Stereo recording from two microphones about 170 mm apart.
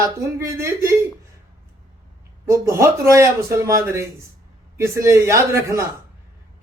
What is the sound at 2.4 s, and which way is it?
A woman's voice, 15° right (ahead or behind).